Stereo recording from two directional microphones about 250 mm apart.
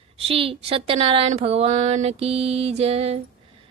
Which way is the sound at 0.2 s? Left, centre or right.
Right.